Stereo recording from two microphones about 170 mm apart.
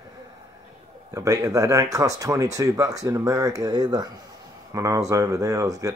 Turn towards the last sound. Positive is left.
turn(degrees=-20)  # may be behind; listen again after turning